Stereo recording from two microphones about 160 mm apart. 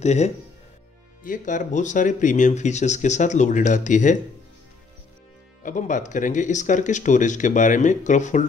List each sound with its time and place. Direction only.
0.0 s speech: 45° left (ahead or behind)
1.2 s speech: 55° left (ahead or behind)
5.6 s speech: 55° left (ahead or behind)